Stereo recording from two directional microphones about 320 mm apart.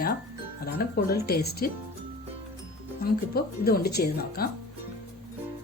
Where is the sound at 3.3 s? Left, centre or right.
Left.